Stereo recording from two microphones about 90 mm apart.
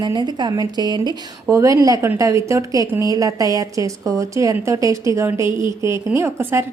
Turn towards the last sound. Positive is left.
turn(degrees=-25)  # may be behind; listen again after turning